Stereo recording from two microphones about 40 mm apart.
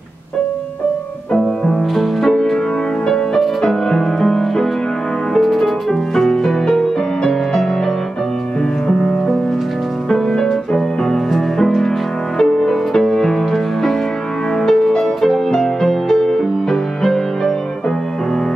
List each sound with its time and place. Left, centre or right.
1.6 s music: centre
8.8 s music: centre